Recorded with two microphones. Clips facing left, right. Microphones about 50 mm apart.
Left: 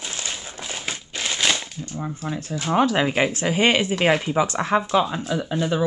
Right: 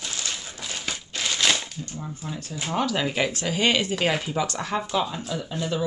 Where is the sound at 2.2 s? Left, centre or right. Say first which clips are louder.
Left 5 dB; left.